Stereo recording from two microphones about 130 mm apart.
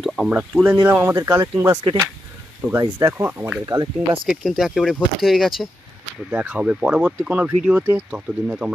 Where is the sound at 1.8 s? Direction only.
35° right (ahead or behind).